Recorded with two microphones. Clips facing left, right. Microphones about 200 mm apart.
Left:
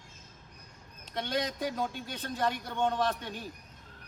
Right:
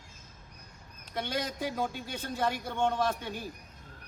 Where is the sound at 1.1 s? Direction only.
5° right (ahead or behind).